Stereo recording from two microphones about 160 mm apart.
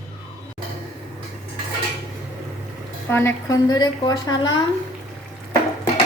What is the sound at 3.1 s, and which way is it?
A woman's voice, 15° left (ahead or behind).